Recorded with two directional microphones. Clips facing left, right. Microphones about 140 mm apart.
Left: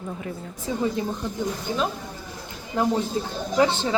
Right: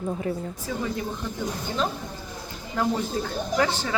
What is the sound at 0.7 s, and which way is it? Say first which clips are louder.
Speech: left 4 dB; 20° left (ahead or behind).